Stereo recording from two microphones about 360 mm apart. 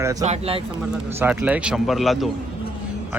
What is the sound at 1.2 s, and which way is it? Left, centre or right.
A man's voice, centre.